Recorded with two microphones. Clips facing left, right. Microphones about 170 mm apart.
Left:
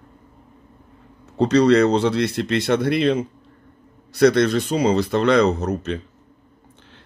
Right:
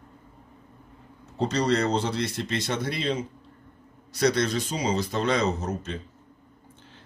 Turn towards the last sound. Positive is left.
turn(degrees=65)  # may be behind; listen again after turning